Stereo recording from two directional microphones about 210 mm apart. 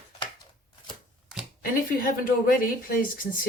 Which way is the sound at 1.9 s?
40° left (ahead or behind).